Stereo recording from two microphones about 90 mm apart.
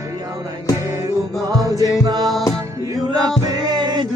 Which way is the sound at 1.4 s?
40° right (ahead or behind).